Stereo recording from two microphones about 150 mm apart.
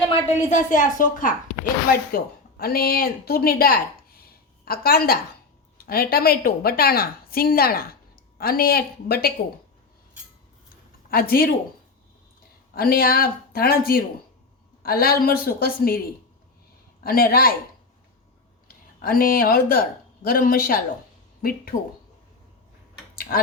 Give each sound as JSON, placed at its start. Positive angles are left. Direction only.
{"t": 0.5, "sound": "a woman's voice", "side_deg": 60}
{"t": 1.9, "sound": "a woman's voice", "side_deg": 90}
{"t": 11.1, "sound": "speech", "side_deg": 80}
{"t": 12.7, "sound": "speech", "side_deg": 85}
{"t": 17.0, "sound": "speech", "side_deg": 80}
{"t": 18.7, "sound": "speech", "side_deg": 75}
{"t": 23.1, "sound": "tick-tock", "side_deg": 75}